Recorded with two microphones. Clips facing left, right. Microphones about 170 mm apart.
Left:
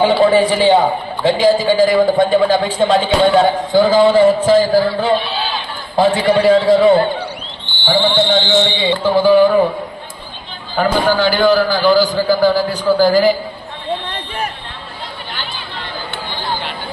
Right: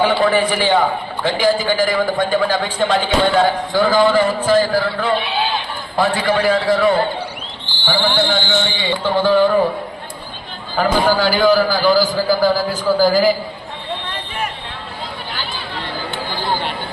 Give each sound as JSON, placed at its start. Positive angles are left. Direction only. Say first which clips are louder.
{"t": 0.0, "sound": "a man's voice", "louder": "left 4 dB", "side_deg": 20}
{"t": 9.1, "sound": "speech", "louder": "left 4 dB", "side_deg": 10}
{"t": 10.8, "sound": "a man's voice", "louder": "left 1 dB", "side_deg": 0}